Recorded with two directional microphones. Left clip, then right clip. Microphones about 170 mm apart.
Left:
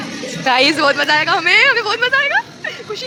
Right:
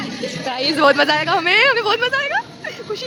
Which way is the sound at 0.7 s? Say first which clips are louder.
Even; 15° right (ahead or behind).